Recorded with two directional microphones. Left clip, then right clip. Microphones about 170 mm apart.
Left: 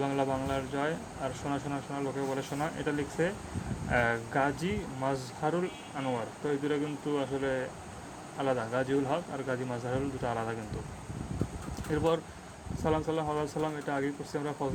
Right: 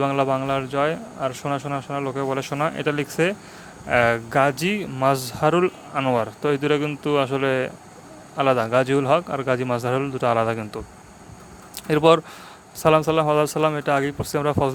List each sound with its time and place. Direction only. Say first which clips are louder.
0.0 s a man's voice: right 10 dB; 35° right (ahead or behind)
11.9 s speech: right 14 dB; 50° right (ahead or behind)